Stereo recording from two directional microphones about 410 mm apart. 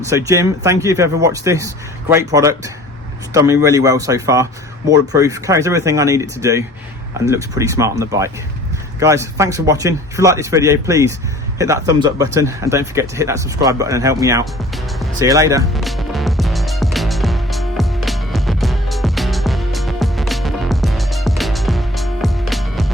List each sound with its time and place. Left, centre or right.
0.0 s speech: centre
14.9 s music: centre